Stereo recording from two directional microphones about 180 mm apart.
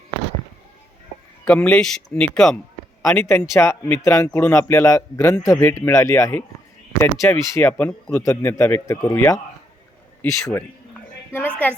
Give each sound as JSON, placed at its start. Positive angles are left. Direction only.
{"t": 1.5, "sound": "a man's voice", "side_deg": 5}